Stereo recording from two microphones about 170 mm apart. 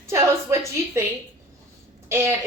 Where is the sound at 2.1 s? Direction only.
15° right (ahead or behind).